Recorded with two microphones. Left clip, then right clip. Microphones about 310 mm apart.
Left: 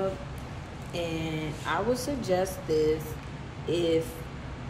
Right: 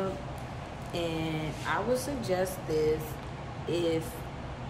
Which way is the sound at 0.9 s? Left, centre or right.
Centre.